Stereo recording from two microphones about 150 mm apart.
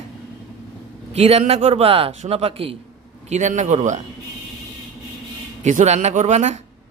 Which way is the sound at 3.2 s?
55° right (ahead or behind).